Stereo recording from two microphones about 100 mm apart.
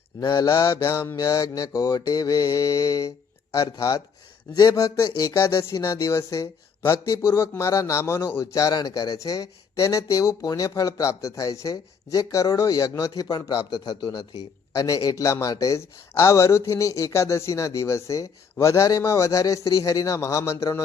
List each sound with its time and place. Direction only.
0.2 s mantra: 50° left (ahead or behind)
0.4 s speech: 30° left (ahead or behind)
8.5 s speech: 40° left (ahead or behind)